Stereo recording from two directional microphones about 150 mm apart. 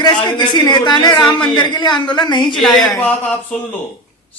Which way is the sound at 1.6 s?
30° left (ahead or behind).